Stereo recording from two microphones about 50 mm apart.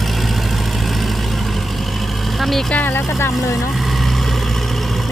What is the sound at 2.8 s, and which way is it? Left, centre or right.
Vehicle, left.